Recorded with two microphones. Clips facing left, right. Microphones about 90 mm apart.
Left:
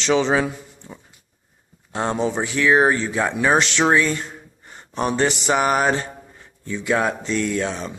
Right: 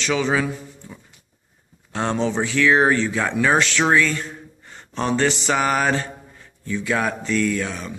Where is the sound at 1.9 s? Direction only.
15° left (ahead or behind).